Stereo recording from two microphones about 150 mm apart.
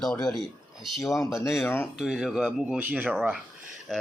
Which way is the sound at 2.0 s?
5° right (ahead or behind).